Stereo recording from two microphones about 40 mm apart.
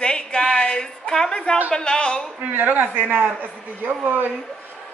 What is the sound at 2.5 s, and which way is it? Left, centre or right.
A woman's voice, right.